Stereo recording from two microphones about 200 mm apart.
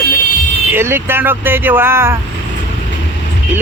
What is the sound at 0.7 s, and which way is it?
Speech, 10° right (ahead or behind).